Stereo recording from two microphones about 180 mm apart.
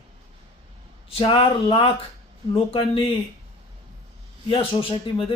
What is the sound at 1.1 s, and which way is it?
Speech, 30° left (ahead or behind).